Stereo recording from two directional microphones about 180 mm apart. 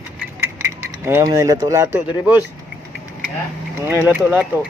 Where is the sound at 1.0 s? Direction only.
15° right (ahead or behind).